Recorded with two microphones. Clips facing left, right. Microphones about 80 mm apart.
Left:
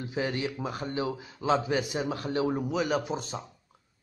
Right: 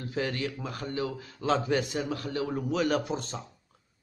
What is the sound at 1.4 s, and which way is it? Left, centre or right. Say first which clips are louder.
Speech: even; centre.